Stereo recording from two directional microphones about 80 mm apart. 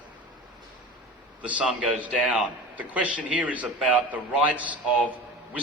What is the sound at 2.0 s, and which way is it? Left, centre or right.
A man's voice, centre.